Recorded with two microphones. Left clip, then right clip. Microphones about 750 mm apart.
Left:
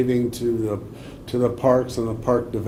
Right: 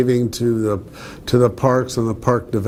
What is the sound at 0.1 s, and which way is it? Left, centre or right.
Speech, right.